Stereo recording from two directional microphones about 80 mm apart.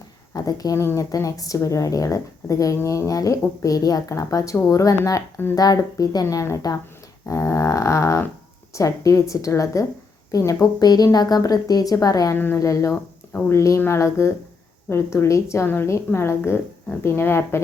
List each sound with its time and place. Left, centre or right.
0.3 s speech: left
6.2 s speech: left
7.3 s a sound: left
8.7 s speech: left
12.3 s a woman's voice: left
12.5 s a woman's voice: left